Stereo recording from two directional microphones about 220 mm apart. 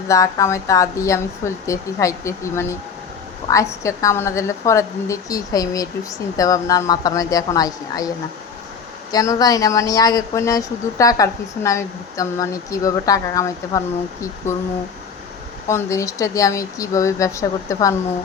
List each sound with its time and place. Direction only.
0.1 s speech: 15° left (ahead or behind)
9.1 s speech: 15° left (ahead or behind)
15.6 s speech: 15° left (ahead or behind)